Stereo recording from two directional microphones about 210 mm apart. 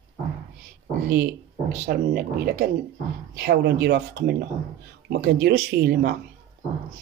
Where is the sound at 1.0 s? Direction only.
45° right (ahead or behind).